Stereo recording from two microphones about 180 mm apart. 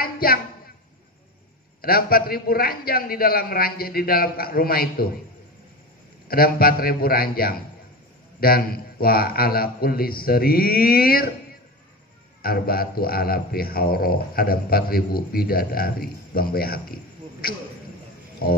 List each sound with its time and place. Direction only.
0.0 s a sound: 55° left (ahead or behind)
1.8 s a man's voice: 55° left (ahead or behind)
6.2 s a man's voice: 55° left (ahead or behind)
12.4 s a man's voice: 55° left (ahead or behind)